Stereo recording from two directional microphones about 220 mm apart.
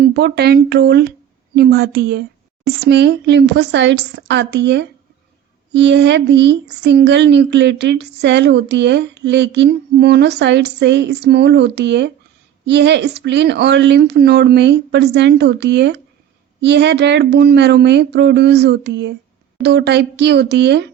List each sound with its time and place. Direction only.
0.0 s speech: 50° right (ahead or behind)